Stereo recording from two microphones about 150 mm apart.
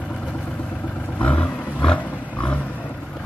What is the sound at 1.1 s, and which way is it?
Vehicle, 10° left (ahead or behind).